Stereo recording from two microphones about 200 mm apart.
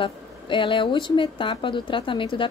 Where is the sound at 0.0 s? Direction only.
25° left (ahead or behind).